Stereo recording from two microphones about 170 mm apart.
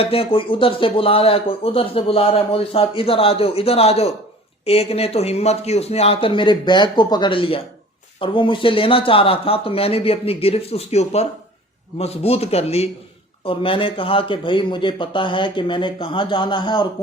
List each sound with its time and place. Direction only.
0.0 s speech: 35° left (ahead or behind)